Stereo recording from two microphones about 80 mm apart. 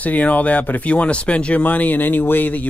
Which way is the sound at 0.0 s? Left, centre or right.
Centre.